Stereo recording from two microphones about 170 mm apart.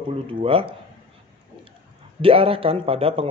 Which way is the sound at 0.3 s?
30° right (ahead or behind).